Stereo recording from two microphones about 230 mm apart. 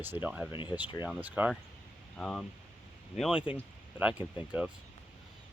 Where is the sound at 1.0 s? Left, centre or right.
Centre.